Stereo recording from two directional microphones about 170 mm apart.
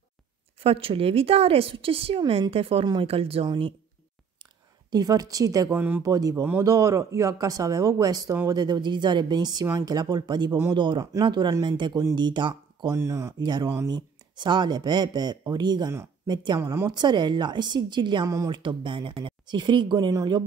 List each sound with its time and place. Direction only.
0.6 s a woman's voice: 35° right (ahead or behind)
4.9 s speech: 20° right (ahead or behind)
12.9 s speech: 15° right (ahead or behind)
16.9 s speech: 25° right (ahead or behind)